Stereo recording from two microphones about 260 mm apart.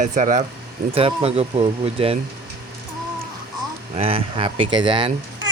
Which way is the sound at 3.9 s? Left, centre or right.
Right.